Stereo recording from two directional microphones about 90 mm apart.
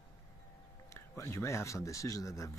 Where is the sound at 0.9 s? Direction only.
35° left (ahead or behind).